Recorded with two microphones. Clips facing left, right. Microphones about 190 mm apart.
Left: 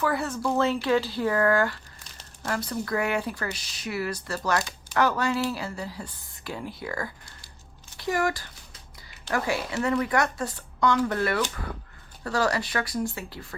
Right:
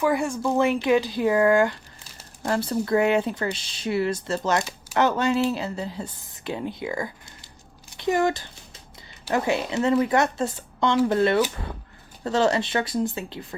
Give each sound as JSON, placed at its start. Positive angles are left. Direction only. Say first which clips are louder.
{"t": 0.0, "sound": "speech", "louder": "right 4 dB", "side_deg": -15}
{"t": 2.5, "sound": "speech", "louder": "right 6 dB", "side_deg": -30}